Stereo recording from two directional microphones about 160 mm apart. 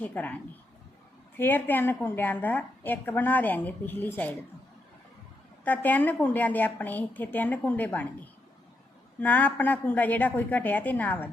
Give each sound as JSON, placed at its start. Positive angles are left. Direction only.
{"t": 0.0, "sound": "a woman's voice", "side_deg": 10}
{"t": 1.4, "sound": "a woman's voice", "side_deg": 10}
{"t": 5.6, "sound": "a woman's voice", "side_deg": 10}
{"t": 9.2, "sound": "a woman's voice", "side_deg": 10}